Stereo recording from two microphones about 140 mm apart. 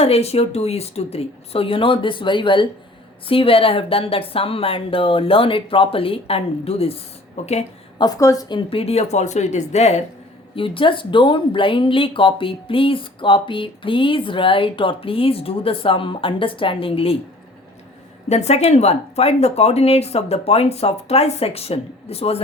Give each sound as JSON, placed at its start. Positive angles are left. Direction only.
{"t": 0.0, "sound": "speech", "side_deg": 45}
{"t": 7.9, "sound": "speech", "side_deg": 30}
{"t": 10.5, "sound": "speech", "side_deg": 40}
{"t": 18.3, "sound": "speech", "side_deg": 50}